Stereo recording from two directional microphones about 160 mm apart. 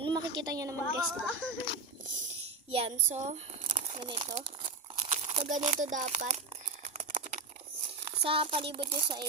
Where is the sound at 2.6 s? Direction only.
40° right (ahead or behind).